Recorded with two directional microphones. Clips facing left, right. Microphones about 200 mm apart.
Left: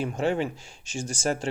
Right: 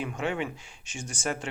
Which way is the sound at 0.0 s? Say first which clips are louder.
Left 5 dB; 35° left (ahead or behind).